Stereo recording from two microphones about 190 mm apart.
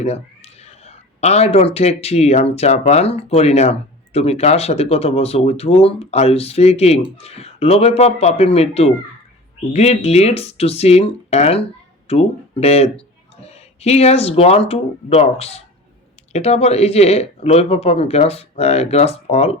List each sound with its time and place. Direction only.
0.0 s speech: 35° left (ahead or behind)